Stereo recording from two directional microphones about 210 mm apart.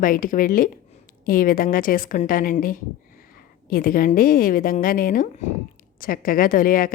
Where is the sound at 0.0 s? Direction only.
40° left (ahead or behind).